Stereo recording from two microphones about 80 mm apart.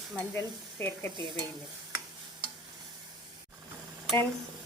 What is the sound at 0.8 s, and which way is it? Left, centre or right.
Stir, left.